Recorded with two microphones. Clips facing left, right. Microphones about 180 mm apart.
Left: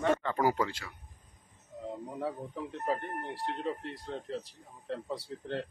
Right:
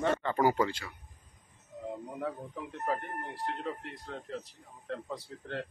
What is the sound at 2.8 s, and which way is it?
Speech, 30° left (ahead or behind).